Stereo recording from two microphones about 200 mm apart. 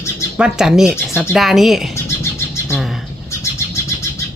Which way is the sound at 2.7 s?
Centre (ahead or behind).